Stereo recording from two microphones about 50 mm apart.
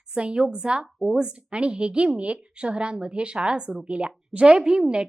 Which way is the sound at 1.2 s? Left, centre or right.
Right.